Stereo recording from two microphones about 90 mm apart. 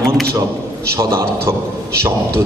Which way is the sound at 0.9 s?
30° right (ahead or behind).